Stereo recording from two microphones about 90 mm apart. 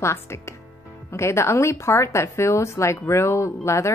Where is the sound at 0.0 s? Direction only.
30° left (ahead or behind).